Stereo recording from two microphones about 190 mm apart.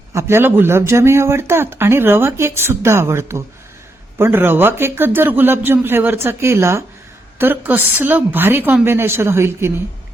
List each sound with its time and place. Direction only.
0.1 s speech: 15° right (ahead or behind)